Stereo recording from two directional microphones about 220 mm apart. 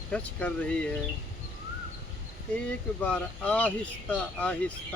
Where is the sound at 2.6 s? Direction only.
5° left (ahead or behind).